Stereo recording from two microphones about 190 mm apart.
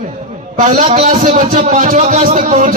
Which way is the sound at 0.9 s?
40° right (ahead or behind).